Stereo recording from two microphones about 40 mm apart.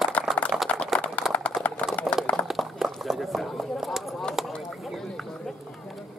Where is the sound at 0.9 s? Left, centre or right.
Left.